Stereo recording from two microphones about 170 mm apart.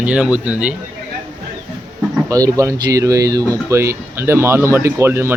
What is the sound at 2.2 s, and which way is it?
Speech, 20° right (ahead or behind).